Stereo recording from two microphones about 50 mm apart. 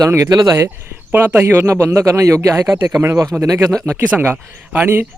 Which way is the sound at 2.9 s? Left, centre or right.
Right.